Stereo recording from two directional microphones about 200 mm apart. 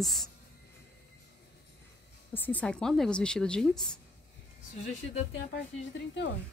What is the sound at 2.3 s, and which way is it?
A woman's voice, 10° left (ahead or behind).